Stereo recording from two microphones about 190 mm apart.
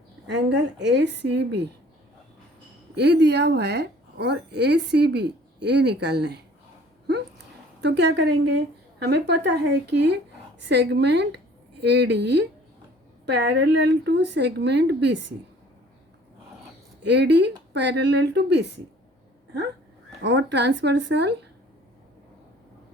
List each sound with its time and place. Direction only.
0.3 s a woman's voice: 65° right (ahead or behind)
2.9 s a woman's voice: 60° right (ahead or behind)
7.8 s a woman's voice: 65° right (ahead or behind)
17.0 s a woman's voice: 65° right (ahead or behind)
20.2 s a woman's voice: 65° right (ahead or behind)